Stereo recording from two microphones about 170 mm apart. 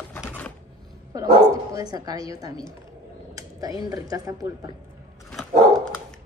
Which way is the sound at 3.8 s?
20° right (ahead or behind).